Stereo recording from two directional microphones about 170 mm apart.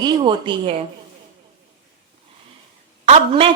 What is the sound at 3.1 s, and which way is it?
Speech, 30° right (ahead or behind).